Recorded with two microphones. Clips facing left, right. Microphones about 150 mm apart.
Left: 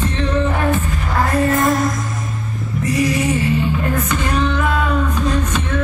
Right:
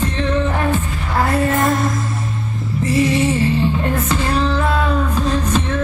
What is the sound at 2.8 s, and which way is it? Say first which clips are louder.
Music: right 2 dB; 30° right (ahead or behind).